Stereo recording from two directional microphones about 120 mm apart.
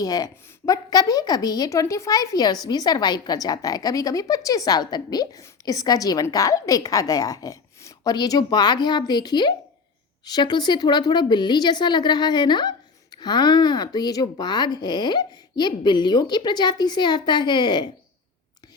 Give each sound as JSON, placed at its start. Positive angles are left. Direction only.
{"t": 0.0, "sound": "a woman's voice", "side_deg": 30}